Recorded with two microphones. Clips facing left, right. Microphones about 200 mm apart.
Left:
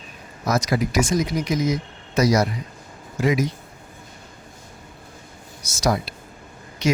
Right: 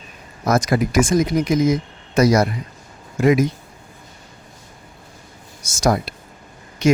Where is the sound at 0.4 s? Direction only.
50° right (ahead or behind).